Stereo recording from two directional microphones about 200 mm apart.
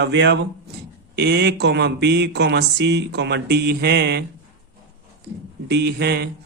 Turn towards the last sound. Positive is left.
turn(degrees=-55)  # may be behind; listen again after turning